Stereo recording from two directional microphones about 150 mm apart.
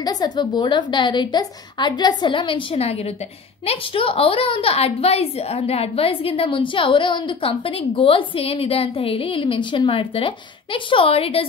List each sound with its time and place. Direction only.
0.0 s a woman's voice: 25° left (ahead or behind)